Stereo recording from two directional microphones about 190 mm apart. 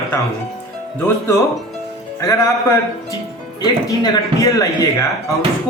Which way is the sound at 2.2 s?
15° left (ahead or behind).